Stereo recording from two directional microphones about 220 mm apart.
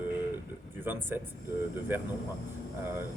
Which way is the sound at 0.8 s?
10° right (ahead or behind).